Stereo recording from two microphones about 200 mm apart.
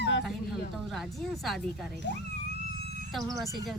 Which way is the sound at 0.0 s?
60° left (ahead or behind).